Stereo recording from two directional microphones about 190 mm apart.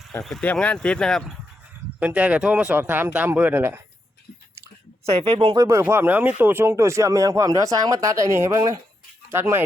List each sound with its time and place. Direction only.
0.1 s speech: centre (ahead or behind)
5.0 s speech: 30° right (ahead or behind)
5.6 s speech: 15° right (ahead or behind)